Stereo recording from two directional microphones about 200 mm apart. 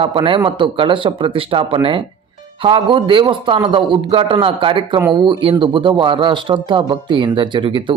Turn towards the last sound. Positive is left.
turn(degrees=-25)  # may be behind; listen again after turning